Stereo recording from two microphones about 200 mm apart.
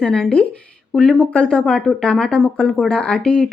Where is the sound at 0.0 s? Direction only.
5° left (ahead or behind).